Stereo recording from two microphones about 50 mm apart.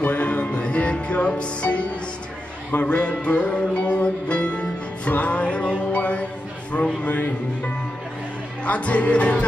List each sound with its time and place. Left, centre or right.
0.0 s music: left
7.0 s a man's voice: left
8.6 s music: left